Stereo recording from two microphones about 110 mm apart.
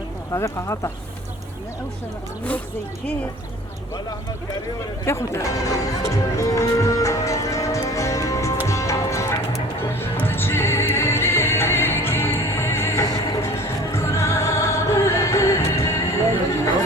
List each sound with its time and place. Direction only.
0.3 s speech: 25° left (ahead or behind)
5.0 s speech: 25° left (ahead or behind)
8.6 s music: 30° left (ahead or behind)